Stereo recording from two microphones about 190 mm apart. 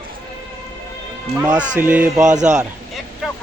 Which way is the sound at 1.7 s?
10° right (ahead or behind).